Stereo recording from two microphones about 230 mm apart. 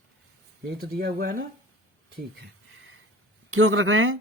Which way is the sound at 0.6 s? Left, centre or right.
Right.